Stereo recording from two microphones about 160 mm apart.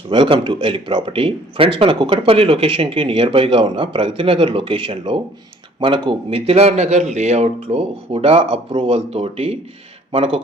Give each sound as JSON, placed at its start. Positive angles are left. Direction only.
{"t": 0.1, "sound": "speech", "side_deg": -35}